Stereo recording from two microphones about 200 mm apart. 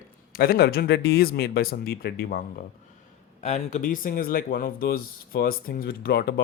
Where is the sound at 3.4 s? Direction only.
35° left (ahead or behind); by 6.4 s 50° left (ahead or behind).